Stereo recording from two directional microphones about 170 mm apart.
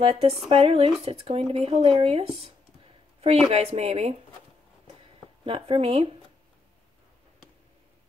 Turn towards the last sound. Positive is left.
turn(degrees=-35)  # may be behind; listen again after turning